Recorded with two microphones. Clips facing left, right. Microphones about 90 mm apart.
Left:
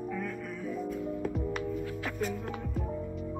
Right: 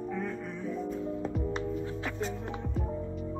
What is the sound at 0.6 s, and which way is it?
Music, 5° left (ahead or behind).